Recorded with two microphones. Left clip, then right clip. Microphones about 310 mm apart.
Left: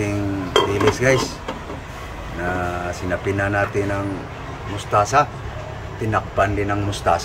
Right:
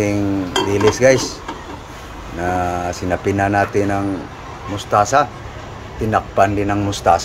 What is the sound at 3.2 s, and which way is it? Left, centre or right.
Speech, centre.